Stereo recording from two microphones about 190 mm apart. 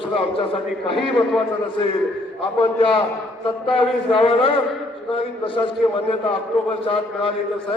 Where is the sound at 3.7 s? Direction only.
30° left (ahead or behind).